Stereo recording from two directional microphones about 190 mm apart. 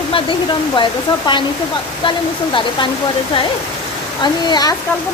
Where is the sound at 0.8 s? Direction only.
25° left (ahead or behind).